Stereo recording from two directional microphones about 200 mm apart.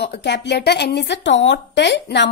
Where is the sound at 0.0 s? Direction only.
60° left (ahead or behind).